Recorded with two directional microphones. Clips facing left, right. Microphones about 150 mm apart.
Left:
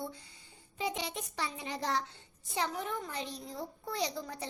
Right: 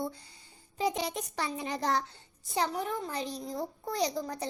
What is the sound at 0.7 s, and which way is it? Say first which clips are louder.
Child singing: right 5 dB; 40° right (ahead or behind).